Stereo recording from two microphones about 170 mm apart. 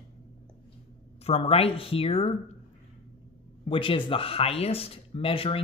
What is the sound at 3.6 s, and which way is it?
Speech, 30° left (ahead or behind).